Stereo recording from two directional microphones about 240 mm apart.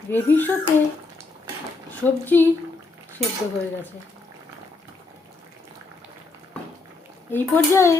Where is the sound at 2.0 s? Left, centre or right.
Centre.